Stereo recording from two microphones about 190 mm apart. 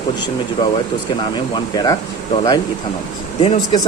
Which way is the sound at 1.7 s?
20° left (ahead or behind).